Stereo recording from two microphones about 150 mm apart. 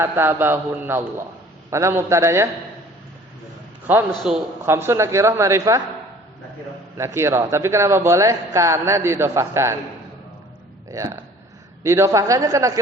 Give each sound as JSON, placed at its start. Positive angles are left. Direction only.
{"t": 0.0, "sound": "a man's voice", "side_deg": -15}
{"t": 3.8, "sound": "a man's voice", "side_deg": -10}
{"t": 6.9, "sound": "a man's voice", "side_deg": -20}
{"t": 10.8, "sound": "a man's voice", "side_deg": -20}